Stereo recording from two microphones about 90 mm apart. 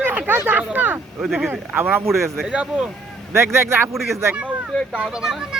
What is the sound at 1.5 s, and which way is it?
Speech, 25° right (ahead or behind).